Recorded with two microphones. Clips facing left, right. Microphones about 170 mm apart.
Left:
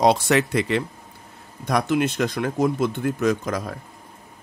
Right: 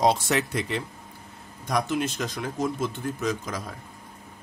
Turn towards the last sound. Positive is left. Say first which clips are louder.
# left 7 dB
turn(degrees=60)  # may be behind; listen again after turning